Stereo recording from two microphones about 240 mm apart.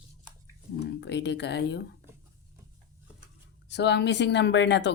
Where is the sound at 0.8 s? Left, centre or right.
Left.